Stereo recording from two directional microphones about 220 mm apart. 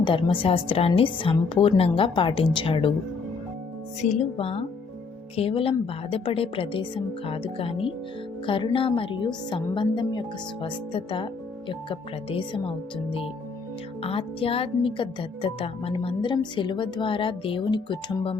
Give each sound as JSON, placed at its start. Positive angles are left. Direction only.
{"t": 0.0, "sound": "a woman's voice", "side_deg": 20}
{"t": 4.0, "sound": "a woman's voice", "side_deg": 30}